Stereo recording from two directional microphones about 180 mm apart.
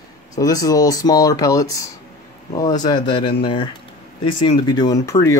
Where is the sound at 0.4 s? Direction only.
20° left (ahead or behind).